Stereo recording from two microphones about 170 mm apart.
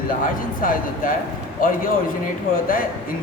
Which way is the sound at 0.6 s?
55° left (ahead or behind).